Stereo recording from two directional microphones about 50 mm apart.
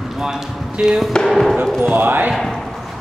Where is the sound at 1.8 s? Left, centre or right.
Right.